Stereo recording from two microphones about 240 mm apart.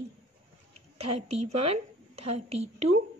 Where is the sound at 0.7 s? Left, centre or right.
Right.